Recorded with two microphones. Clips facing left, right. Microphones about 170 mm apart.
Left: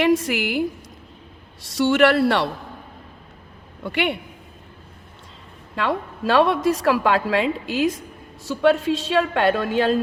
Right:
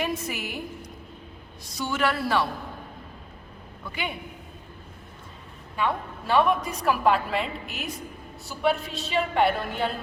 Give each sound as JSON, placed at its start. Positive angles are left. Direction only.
{"t": 0.0, "sound": "a woman's voice", "side_deg": 80}
{"t": 1.6, "sound": "a man's voice", "side_deg": 80}
{"t": 3.8, "sound": "a man's voice", "side_deg": 75}
{"t": 5.7, "sound": "a woman's voice", "side_deg": 90}